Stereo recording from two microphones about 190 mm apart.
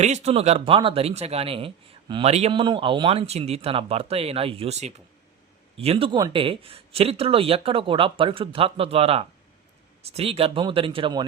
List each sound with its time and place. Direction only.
0.0 s speech: 35° right (ahead or behind)